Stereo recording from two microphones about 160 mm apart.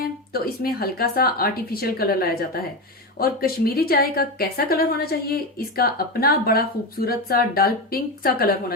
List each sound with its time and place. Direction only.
0.0 s a woman's voice: 70° left (ahead or behind)